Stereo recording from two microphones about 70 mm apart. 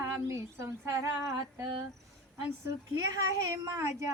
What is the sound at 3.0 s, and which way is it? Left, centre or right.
Speech, right.